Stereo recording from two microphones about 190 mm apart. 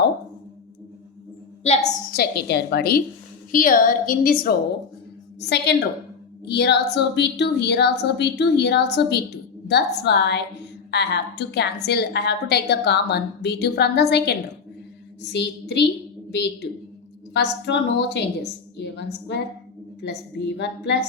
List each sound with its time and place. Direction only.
1.6 s a woman's voice: 30° left (ahead or behind)
2.1 s a woman's voice: 60° left (ahead or behind)
5.4 s a woman's voice: 60° left (ahead or behind)